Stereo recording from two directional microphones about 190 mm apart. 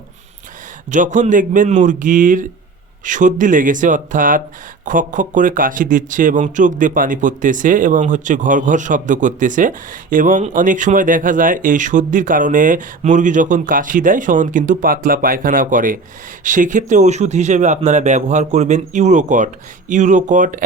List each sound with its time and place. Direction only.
0.9 s speech: 40° right (ahead or behind)